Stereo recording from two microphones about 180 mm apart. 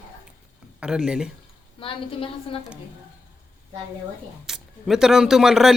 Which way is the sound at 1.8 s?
30° left (ahead or behind).